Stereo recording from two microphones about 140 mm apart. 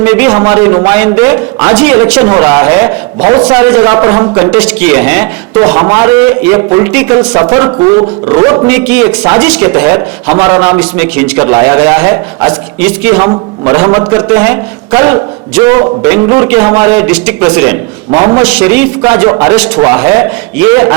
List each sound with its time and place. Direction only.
0.0 s a man's voice: 15° right (ahead or behind)
3.2 s a man's voice: 30° right (ahead or behind)
3.5 s a man's voice: 15° right (ahead or behind)
4.6 s a man's voice: 10° right (ahead or behind)
5.5 s a man's voice: 25° right (ahead or behind)
7.8 s speech: 35° right (ahead or behind)
8.6 s a man's voice: 10° right (ahead or behind)
13.1 s a man's voice: 25° right (ahead or behind)
18.1 s a man's voice: 30° right (ahead or behind)
18.4 s a man's voice: 10° right (ahead or behind)
19.5 s a man's voice: 10° right (ahead or behind)